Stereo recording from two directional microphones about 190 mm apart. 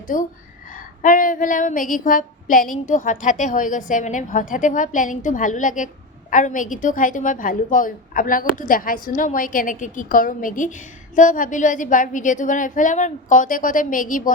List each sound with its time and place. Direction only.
0.1 s a woman's voice: 45° left (ahead or behind)